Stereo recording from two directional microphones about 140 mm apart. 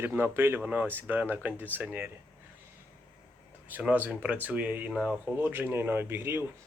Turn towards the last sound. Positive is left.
turn(degrees=-15)  # may be behind; listen again after turning